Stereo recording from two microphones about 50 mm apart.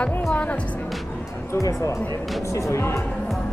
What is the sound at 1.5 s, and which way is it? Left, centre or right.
Speech, left.